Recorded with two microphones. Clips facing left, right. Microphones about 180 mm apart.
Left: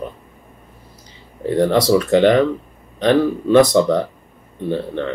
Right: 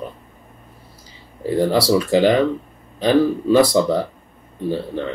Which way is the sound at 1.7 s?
30° right (ahead or behind).